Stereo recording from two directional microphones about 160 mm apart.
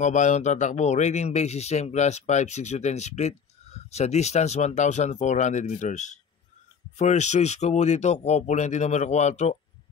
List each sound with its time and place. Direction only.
0.0 s speech: 50° left (ahead or behind)